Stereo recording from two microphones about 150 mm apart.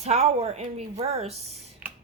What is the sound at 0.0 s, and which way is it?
A woman's voice, 45° right (ahead or behind).